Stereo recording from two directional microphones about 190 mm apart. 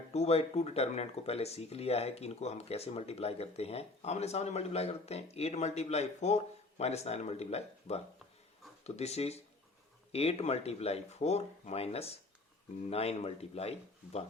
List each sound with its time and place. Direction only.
0.1 s speech: 35° left (ahead or behind)